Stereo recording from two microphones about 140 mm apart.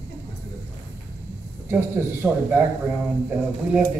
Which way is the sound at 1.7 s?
15° right (ahead or behind).